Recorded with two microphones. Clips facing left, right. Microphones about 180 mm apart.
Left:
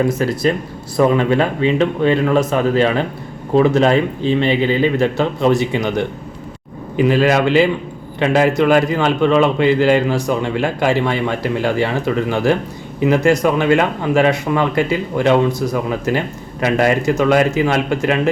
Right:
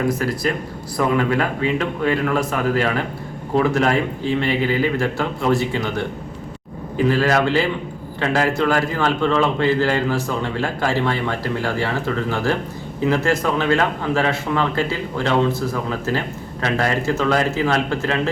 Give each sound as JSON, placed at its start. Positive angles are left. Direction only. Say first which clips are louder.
{"t": 0.1, "sound": "a man's voice", "louder": "left 4 dB", "side_deg": 25}